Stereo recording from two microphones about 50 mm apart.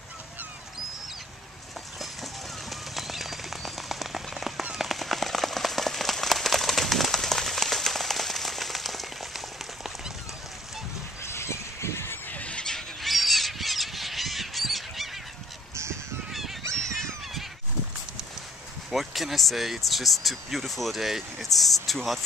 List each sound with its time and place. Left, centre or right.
2.7 s bird: centre
4.7 s a sound: centre
11.2 s squeal: left
12.3 s squeal: left
12.6 s fowl: centre
13.1 s crow: centre
15.7 s honk: right
16.3 s honk: centre
16.7 s honk: centre
18.9 s speech: centre